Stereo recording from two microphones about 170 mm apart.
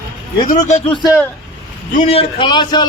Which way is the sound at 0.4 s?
45° left (ahead or behind).